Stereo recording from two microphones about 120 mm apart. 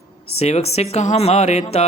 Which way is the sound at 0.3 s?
60° left (ahead or behind).